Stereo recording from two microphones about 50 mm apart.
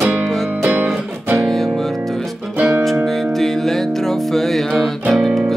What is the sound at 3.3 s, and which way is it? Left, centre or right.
Music, centre.